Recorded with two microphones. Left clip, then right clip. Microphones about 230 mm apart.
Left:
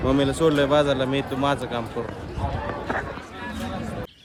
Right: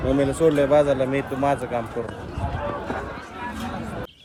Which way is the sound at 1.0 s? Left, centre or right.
Centre.